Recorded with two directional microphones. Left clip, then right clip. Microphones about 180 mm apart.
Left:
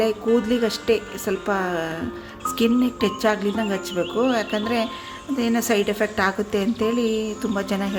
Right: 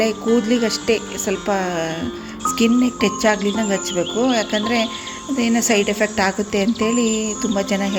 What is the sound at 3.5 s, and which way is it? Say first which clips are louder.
Speech: right 4 dB; 5° right (ahead or behind).